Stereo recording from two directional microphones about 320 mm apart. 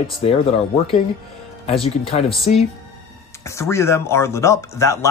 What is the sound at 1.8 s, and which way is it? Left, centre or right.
Speech, centre.